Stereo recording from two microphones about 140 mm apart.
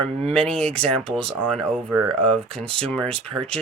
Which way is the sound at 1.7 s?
15° right (ahead or behind).